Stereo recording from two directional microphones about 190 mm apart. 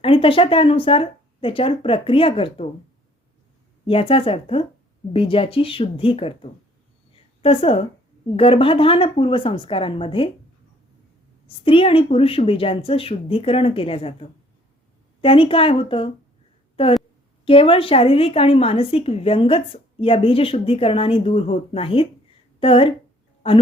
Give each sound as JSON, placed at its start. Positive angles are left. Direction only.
{"t": 0.0, "sound": "a woman's voice", "side_deg": 30}
{"t": 3.8, "sound": "a woman's voice", "side_deg": 30}
{"t": 7.1, "sound": "a sound", "side_deg": 30}
{"t": 8.4, "sound": "a woman's voice", "side_deg": 30}
{"t": 11.4, "sound": "a woman's voice", "side_deg": 30}